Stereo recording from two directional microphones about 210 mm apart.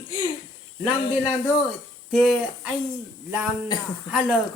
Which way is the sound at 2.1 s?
Centre (ahead or behind).